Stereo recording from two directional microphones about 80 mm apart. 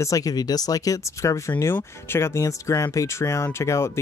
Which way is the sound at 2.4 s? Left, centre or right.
Left.